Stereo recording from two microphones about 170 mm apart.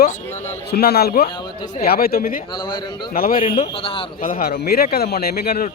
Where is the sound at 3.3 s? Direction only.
30° left (ahead or behind).